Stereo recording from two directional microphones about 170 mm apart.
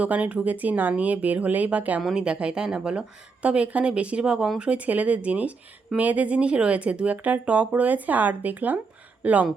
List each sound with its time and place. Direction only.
0.0 s speech: 10° right (ahead or behind)